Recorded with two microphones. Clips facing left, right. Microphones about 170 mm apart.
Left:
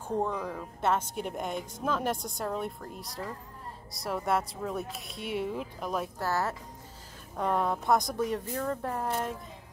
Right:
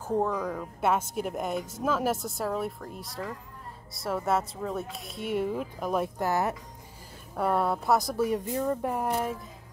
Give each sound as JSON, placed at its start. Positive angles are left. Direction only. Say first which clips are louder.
{"t": 0.1, "sound": "a woman's voice", "louder": "right 3 dB", "side_deg": 0}
{"t": 0.7, "sound": "a woman's voice", "louder": "right 2 dB", "side_deg": -10}
{"t": 6.1, "sound": "speech", "louder": "right 3 dB", "side_deg": -15}
{"t": 7.3, "sound": "speech", "louder": "right 2 dB", "side_deg": -5}